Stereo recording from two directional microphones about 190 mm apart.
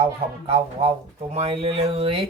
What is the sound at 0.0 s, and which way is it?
Speech, 30° right (ahead or behind).